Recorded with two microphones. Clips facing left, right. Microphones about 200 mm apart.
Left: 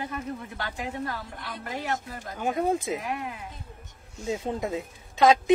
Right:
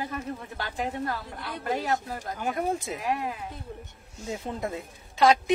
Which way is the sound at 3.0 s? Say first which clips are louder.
Right 3 dB; 35° right (ahead or behind).